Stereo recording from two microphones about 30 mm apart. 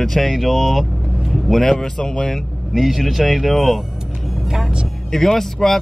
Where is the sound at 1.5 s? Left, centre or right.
Centre.